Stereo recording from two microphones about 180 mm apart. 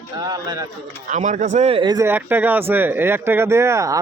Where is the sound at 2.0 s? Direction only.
10° right (ahead or behind).